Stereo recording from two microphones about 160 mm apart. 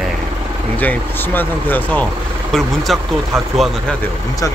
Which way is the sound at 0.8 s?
10° left (ahead or behind).